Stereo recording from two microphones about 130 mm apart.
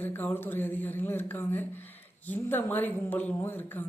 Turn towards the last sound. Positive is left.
turn(degrees=15)  # may be behind; listen again after turning